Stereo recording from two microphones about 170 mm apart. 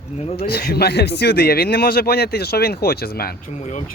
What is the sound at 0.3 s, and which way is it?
A man's voice, 70° left (ahead or behind).